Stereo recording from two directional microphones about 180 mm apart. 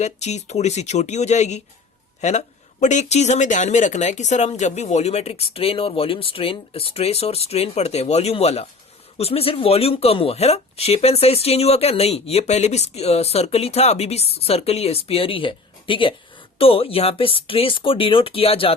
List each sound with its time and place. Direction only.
0.0 s speech: 40° left (ahead or behind)
2.8 s speech: 40° left (ahead or behind)